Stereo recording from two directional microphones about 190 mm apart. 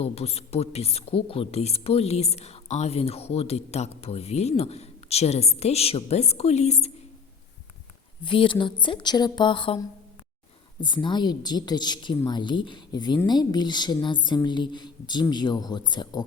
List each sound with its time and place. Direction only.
0.0 s a woman's voice: 30° left (ahead or behind)
8.2 s a woman's voice: 25° left (ahead or behind)
10.8 s a woman's voice: 25° left (ahead or behind)